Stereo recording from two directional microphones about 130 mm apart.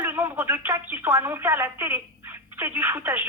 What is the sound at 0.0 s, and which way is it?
Telephone, 20° right (ahead or behind).